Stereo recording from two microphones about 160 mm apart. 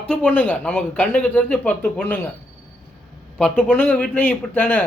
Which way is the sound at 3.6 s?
10° left (ahead or behind).